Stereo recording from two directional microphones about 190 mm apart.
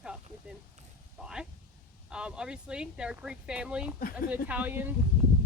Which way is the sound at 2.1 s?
5° right (ahead or behind).